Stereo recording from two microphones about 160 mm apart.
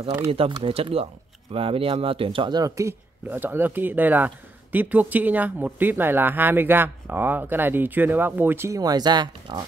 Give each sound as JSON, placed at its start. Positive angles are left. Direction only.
{"t": 0.3, "sound": "speech", "side_deg": -30}